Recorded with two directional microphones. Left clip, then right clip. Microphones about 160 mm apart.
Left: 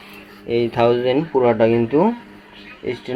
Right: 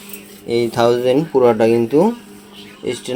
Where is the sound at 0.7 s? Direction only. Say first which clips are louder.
Right 2 dB; 25° right (ahead or behind).